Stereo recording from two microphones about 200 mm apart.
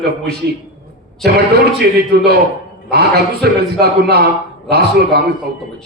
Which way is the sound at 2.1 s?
55° right (ahead or behind).